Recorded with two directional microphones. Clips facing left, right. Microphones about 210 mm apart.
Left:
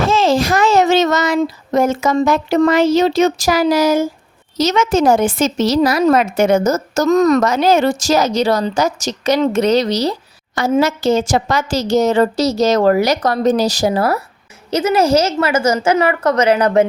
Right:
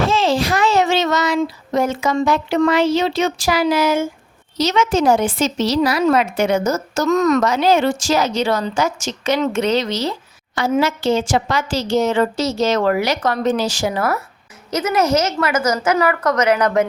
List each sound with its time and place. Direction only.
0.0 s a child's voice: 45° left (ahead or behind)